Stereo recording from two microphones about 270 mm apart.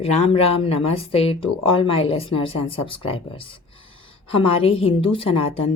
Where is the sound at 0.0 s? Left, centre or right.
Left.